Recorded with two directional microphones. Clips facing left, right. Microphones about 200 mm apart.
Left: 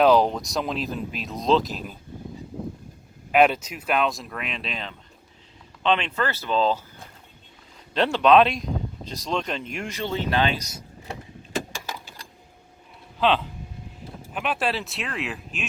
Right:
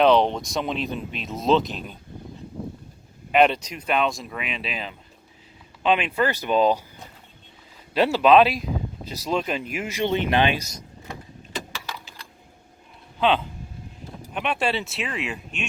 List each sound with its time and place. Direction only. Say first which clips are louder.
0.0 s speech: even; centre (ahead or behind)
3.3 s speech: even; 5° left (ahead or behind); by 6.8 s 15° right (ahead or behind)
7.9 s speech: right 1 dB; 5° right (ahead or behind)
10.0 s speech: right 3 dB; 20° right (ahead or behind)
11.7 s vehicle: left 1 dB; 45° left (ahead or behind)
13.1 s speech: right 1 dB; centre (ahead or behind)